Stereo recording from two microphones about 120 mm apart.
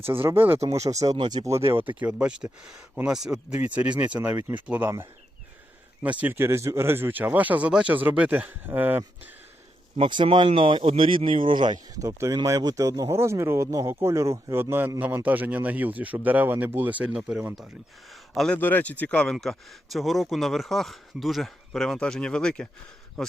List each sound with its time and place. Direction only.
0.0 s speech: 20° right (ahead or behind)
1.0 s speech: 35° right (ahead or behind)
1.5 s speech: 20° right (ahead or behind)
2.0 s speech: 10° right (ahead or behind)
10.0 s speech: 45° right (ahead or behind)
11.9 s speech: 30° right (ahead or behind); by 17.7 s 5° right (ahead or behind)
18.1 s a sound: centre (ahead or behind)
18.5 s speech: 15° left (ahead or behind)